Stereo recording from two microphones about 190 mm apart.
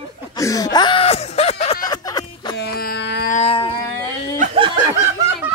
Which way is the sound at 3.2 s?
35° left (ahead or behind).